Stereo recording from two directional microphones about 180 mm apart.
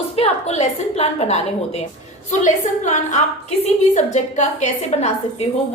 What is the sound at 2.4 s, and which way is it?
A woman's voice, 40° left (ahead or behind).